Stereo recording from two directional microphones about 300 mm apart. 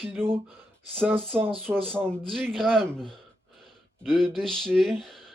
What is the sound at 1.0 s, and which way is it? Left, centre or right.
Speech, centre.